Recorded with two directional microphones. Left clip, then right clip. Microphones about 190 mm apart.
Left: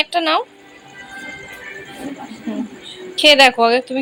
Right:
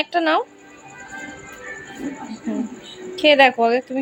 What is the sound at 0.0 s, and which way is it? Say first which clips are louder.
Music: left 2 dB; 15° right (ahead or behind).